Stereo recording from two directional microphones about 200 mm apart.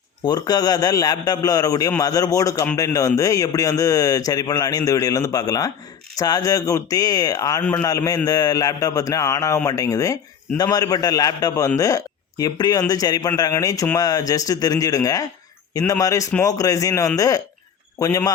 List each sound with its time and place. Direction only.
0.3 s a man's voice: 20° left (ahead or behind)